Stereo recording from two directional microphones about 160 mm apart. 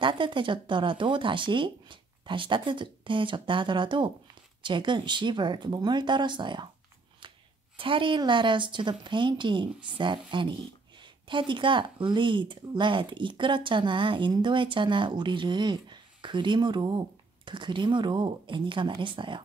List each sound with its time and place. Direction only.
0.0 s speech: 30° right (ahead or behind)
7.7 s speech: 30° right (ahead or behind)